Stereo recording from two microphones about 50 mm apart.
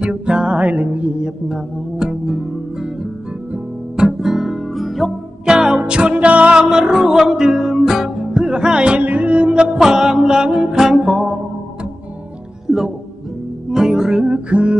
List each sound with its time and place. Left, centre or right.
0.0 s music: centre
1.2 s music: centre
3.9 s guitar: centre
5.4 s music: centre
6.7 s music: centre
9.8 s music: centre
12.6 s music: centre
14.5 s music: right